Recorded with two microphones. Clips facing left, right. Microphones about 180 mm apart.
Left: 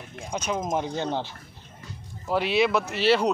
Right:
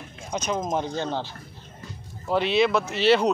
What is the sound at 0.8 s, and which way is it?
Speech, 15° left (ahead or behind).